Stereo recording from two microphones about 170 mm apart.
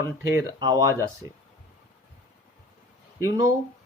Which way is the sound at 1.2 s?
20° right (ahead or behind).